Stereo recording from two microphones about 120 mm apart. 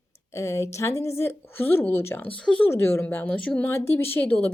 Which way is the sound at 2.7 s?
20° left (ahead or behind).